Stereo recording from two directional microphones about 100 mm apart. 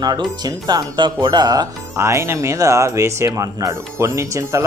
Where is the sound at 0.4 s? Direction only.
40° right (ahead or behind).